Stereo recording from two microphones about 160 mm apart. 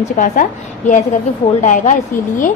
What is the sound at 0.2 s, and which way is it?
A woman's voice, 55° left (ahead or behind).